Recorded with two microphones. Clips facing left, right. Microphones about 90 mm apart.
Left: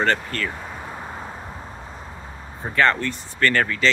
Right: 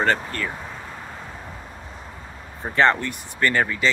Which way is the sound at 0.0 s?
15° right (ahead or behind).